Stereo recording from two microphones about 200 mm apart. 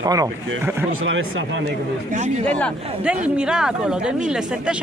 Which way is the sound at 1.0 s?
70° right (ahead or behind).